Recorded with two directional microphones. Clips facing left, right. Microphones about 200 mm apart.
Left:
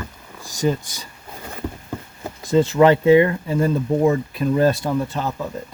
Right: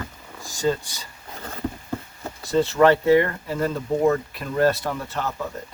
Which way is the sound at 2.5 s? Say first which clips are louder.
Left 3 dB; 15° left (ahead or behind).